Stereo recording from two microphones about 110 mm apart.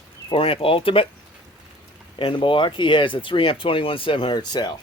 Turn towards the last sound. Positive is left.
turn(degrees=40)  # may be behind; listen again after turning